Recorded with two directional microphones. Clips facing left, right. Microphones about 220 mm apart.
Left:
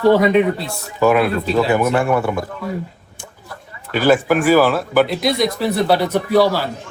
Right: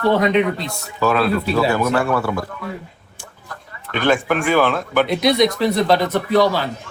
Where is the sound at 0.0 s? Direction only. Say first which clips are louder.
Left 3 dB; 10° left (ahead or behind).